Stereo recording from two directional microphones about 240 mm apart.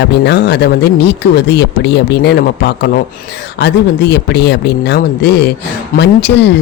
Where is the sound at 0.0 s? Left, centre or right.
Left.